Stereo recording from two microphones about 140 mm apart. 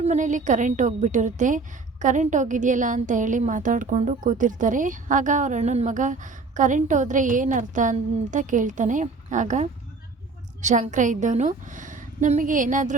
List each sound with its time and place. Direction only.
0.0 s a woman's voice: 60° right (ahead or behind)